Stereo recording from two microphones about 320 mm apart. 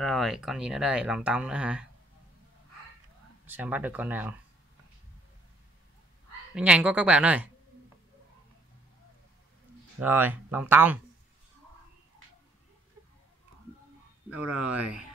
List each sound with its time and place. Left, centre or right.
0.0 s speech: centre
3.4 s speech: centre
6.5 s speech: centre
9.9 s speech: centre
14.6 s speech: centre